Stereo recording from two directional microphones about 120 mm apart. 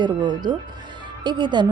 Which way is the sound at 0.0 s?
40° right (ahead or behind).